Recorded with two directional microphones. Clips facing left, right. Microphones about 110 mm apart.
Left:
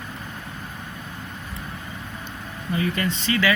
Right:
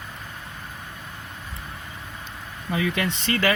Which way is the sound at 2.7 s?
80° right.